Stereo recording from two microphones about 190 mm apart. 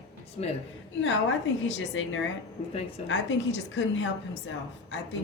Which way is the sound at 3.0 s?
75° left (ahead or behind).